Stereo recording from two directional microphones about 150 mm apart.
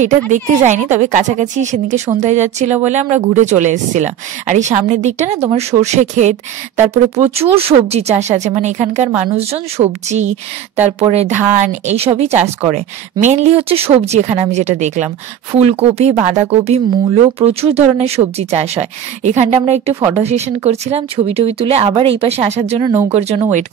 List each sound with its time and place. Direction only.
0.3 s a woman's voice: 55° right (ahead or behind)
7.3 s speech: 40° right (ahead or behind)